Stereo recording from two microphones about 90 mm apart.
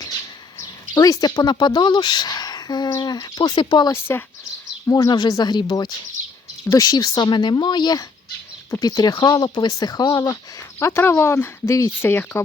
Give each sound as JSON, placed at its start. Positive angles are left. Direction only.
{"t": 0.9, "sound": "a woman's voice", "side_deg": 40}
{"t": 3.9, "sound": "speech", "side_deg": 25}
{"t": 5.0, "sound": "a woman's voice", "side_deg": 55}
{"t": 6.7, "sound": "a woman's voice", "side_deg": 40}
{"t": 10.8, "sound": "speech", "side_deg": 30}